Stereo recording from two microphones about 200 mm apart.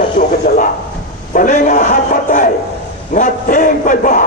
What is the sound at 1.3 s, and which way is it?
A man's voice, 40° left (ahead or behind).